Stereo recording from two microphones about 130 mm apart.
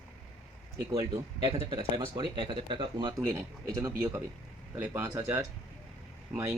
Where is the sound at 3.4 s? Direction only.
20° right (ahead or behind).